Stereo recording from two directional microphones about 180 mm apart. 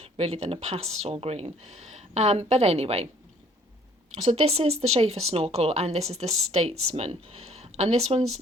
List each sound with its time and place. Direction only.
0.0 s speech: 35° right (ahead or behind)
4.3 s speech: 35° right (ahead or behind)